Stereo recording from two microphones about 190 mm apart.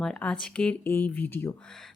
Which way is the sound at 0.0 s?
5° left (ahead or behind).